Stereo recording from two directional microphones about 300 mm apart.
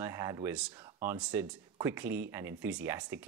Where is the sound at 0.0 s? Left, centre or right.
Centre.